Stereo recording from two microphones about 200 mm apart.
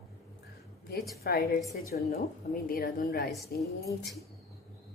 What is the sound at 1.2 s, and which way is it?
A woman's voice, 50° left (ahead or behind).